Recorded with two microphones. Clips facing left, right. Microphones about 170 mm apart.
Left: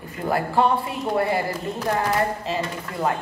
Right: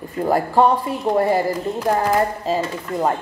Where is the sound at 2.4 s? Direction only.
40° right (ahead or behind).